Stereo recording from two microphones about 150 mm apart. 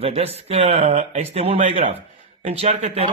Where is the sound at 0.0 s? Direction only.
45° right (ahead or behind).